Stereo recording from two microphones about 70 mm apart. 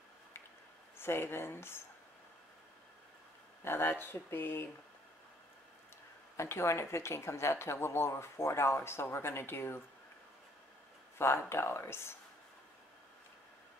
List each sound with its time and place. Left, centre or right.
0.9 s speech: left
3.6 s speech: left
6.3 s speech: left
11.1 s speech: left